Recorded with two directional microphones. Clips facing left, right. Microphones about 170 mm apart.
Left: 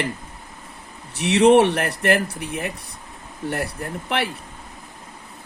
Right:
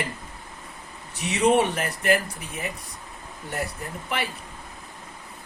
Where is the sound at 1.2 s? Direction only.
75° left (ahead or behind).